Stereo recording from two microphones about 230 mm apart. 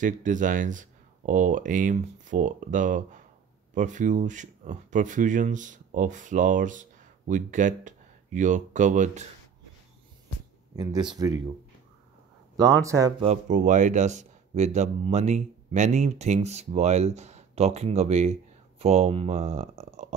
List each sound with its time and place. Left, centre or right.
0.0 s speech: right
11.1 s speech: centre
12.8 s speech: centre
13.2 s speech: right